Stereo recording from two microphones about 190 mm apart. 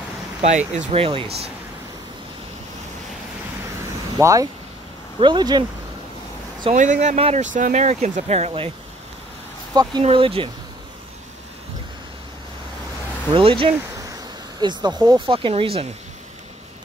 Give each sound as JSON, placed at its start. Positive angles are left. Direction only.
{"t": 0.4, "sound": "speech", "side_deg": -40}
{"t": 4.2, "sound": "speech", "side_deg": -15}
{"t": 6.7, "sound": "speech", "side_deg": -40}
{"t": 10.0, "sound": "speech", "side_deg": -30}
{"t": 13.3, "sound": "speech", "side_deg": -30}